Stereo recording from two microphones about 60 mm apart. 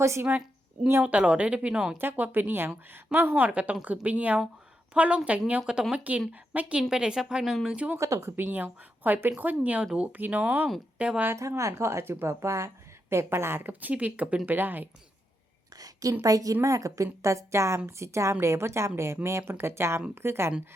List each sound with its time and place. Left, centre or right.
0.0 s speech: right
1.0 s speech: centre
2.0 s a woman's voice: right
6.8 s speech: centre
7.9 s a woman's voice: right
8.4 s a woman's voice: right
9.8 s speech: centre
10.1 s a woman's voice: right
11.3 s speech: right
13.8 s a woman's voice: right
15.7 s a sound: right
16.2 s a woman's voice: right